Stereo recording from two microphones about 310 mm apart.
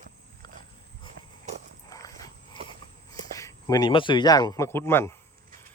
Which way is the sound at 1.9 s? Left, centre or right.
Centre.